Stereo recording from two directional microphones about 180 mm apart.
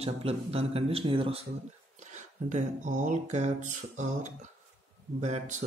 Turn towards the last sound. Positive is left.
turn(degrees=-40)  # may be behind; listen again after turning